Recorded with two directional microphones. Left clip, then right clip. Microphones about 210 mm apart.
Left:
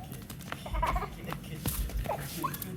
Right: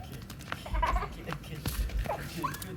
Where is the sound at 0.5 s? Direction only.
Centre (ahead or behind).